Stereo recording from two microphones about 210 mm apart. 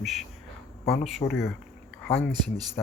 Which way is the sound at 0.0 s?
Centre (ahead or behind).